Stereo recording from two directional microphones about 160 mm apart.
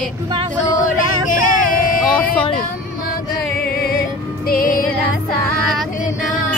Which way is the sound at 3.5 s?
70° left (ahead or behind).